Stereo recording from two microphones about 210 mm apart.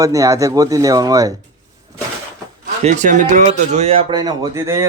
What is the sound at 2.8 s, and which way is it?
Speech, 35° right (ahead or behind).